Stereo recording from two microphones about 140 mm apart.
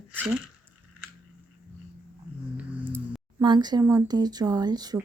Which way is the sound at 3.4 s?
30° right (ahead or behind).